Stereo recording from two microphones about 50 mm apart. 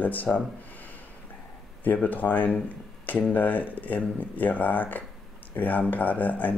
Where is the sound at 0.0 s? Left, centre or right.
Left.